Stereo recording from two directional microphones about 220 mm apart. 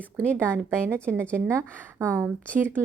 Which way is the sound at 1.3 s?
10° right (ahead or behind).